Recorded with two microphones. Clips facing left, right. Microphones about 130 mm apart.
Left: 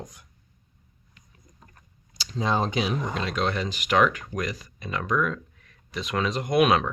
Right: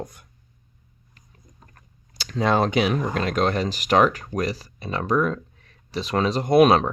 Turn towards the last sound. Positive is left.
turn(degrees=-35)  # may be behind; listen again after turning